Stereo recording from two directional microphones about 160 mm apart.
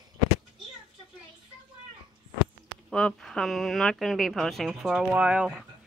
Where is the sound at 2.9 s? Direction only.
5° left (ahead or behind).